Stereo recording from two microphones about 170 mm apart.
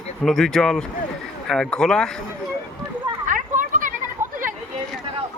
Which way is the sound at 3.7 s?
50° right (ahead or behind).